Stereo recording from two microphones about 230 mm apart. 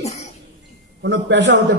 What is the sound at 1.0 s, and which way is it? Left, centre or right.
Speech, right.